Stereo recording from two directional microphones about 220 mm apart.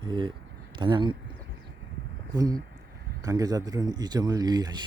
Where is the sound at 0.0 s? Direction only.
20° right (ahead or behind).